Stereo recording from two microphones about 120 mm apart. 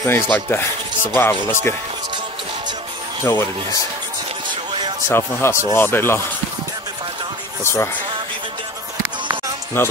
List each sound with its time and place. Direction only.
0.0 s speech: 20° left (ahead or behind)
3.3 s speech: 20° left (ahead or behind)
5.0 s speech: 20° left (ahead or behind)
7.6 s speech: 20° left (ahead or behind)
9.8 s speech: 20° left (ahead or behind)